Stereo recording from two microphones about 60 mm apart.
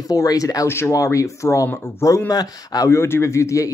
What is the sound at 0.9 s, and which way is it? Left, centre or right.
Speech, left.